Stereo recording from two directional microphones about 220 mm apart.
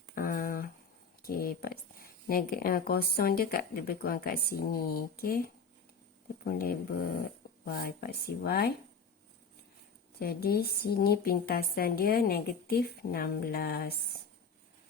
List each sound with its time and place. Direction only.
0.1 s a sound: 40° left (ahead or behind)
1.2 s speech: 40° left (ahead or behind)
10.2 s speech: 45° left (ahead or behind)